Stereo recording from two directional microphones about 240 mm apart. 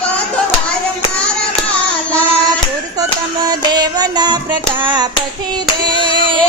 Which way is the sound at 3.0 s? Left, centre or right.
Centre.